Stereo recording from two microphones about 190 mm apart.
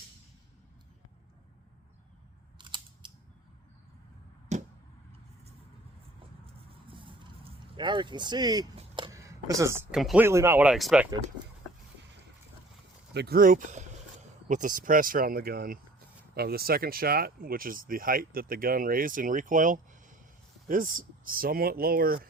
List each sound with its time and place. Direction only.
2.6 s scissors: 25° right (ahead or behind)
4.5 s arrow: 35° right (ahead or behind)
6.4 s vehicle: 25° right (ahead or behind)
9.9 s speech: centre (ahead or behind)
10.2 s speech: 15° right (ahead or behind)
13.1 s speech: 55° right (ahead or behind)